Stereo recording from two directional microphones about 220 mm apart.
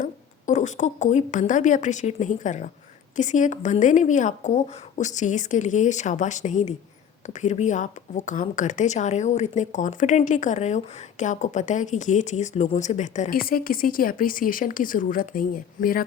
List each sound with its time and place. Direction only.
0.0 s speech: 35° left (ahead or behind)